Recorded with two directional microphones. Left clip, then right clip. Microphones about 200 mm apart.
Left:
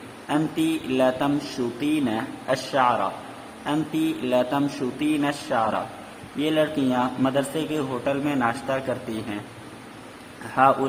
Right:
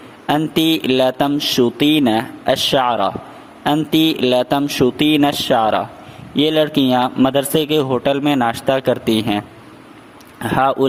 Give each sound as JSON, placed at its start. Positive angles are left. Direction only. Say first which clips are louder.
{"t": 0.3, "sound": "a man's voice", "louder": "right 8 dB", "side_deg": -55}
{"t": 10.5, "sound": "a man's voice", "louder": "right 3 dB", "side_deg": -50}